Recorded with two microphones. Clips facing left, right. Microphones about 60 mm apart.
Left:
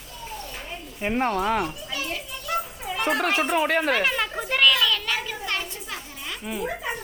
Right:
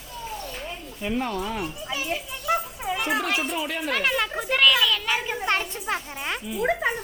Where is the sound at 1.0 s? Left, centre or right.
Left.